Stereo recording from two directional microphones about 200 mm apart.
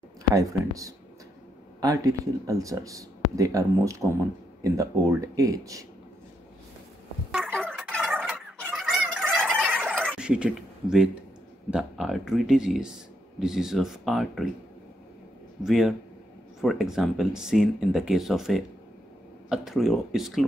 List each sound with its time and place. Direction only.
0.3 s speech: 15° right (ahead or behind)
7.2 s turkey: 5° right (ahead or behind)
8.5 s fowl: centre (ahead or behind)
11.7 s speech: centre (ahead or behind)
15.6 s speech: centre (ahead or behind)